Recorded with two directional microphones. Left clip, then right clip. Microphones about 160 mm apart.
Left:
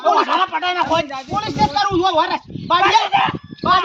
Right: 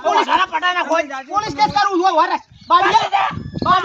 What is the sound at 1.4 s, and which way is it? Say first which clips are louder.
Speech: right 2 dB; 10° left (ahead or behind).